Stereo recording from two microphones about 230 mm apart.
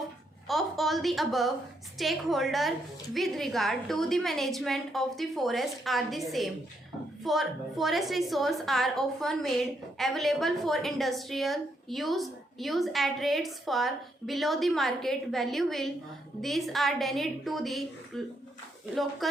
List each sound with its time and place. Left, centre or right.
0.4 s a woman's voice: centre
19.2 s a woman's voice: centre